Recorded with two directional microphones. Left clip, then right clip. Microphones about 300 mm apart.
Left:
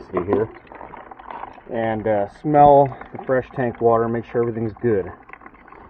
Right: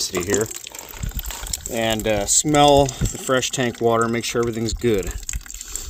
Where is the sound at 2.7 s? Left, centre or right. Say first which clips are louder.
Left 2 dB; right.